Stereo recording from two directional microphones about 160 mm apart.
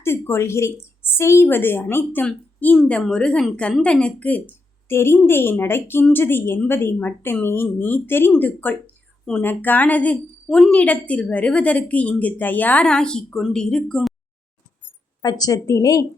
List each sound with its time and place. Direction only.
0.0 s speech: 15° left (ahead or behind)
15.2 s speech: 25° left (ahead or behind)